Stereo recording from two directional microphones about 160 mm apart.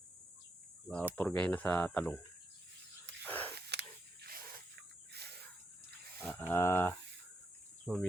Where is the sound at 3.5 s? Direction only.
90° right; by 4.6 s 75° right (ahead or behind).